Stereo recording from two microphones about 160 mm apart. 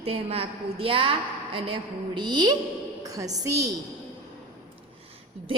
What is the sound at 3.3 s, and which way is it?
Speech, 20° right (ahead or behind).